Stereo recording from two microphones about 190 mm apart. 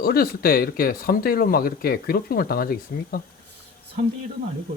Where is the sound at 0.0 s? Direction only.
50° left (ahead or behind).